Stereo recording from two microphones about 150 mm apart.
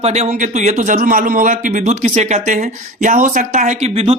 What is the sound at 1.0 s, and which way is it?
Speech, 65° right (ahead or behind).